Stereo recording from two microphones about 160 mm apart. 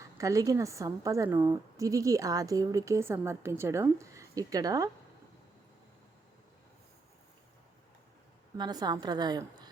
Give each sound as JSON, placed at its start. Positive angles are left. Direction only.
{"t": 0.0, "sound": "a woman's voice", "side_deg": -20}
{"t": 8.5, "sound": "a woman's voice", "side_deg": -25}